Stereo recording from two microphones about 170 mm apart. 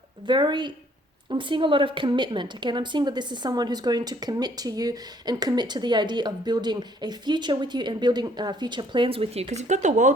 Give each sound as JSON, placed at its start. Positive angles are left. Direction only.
{"t": 0.3, "sound": "a woman's voice", "side_deg": -25}